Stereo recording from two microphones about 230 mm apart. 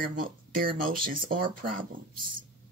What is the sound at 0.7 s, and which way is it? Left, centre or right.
Speech, right.